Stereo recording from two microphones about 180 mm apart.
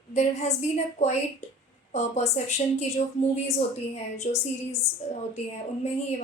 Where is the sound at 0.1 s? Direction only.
40° left (ahead or behind).